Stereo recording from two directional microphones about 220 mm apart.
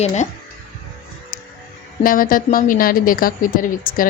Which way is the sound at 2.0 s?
40° left (ahead or behind).